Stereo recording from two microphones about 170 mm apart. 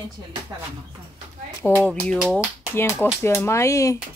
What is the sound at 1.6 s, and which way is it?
Speech, 10° left (ahead or behind).